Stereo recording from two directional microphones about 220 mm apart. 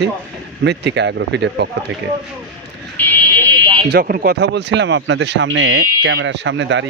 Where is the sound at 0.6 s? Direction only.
50° right (ahead or behind).